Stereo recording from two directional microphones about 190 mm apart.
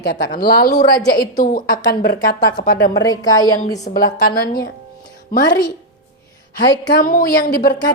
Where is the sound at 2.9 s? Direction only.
20° left (ahead or behind).